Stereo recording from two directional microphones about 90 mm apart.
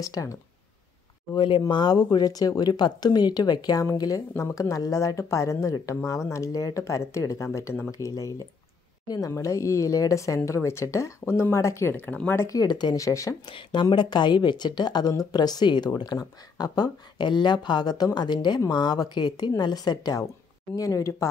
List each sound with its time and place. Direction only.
0.0 s speech: 40° left (ahead or behind)
1.3 s speech: 65° left (ahead or behind)
1.7 s speech: 55° left (ahead or behind)
3.8 s speech: 40° left (ahead or behind)
9.0 s speech: 45° left (ahead or behind)
9.3 s speech: 35° left (ahead or behind)
12.4 s speech: 45° left (ahead or behind)
13.5 s speech: 65° left (ahead or behind); by 21.3 s 35° left (ahead or behind)